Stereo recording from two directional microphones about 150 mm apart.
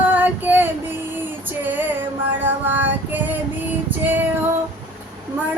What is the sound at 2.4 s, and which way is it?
Child singing, 15° right (ahead or behind).